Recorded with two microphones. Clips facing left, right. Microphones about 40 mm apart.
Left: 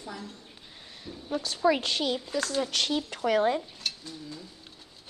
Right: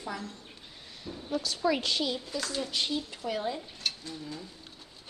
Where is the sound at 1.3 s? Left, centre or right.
Left.